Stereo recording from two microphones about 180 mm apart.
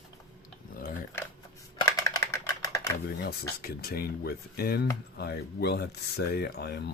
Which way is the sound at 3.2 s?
60° left (ahead or behind).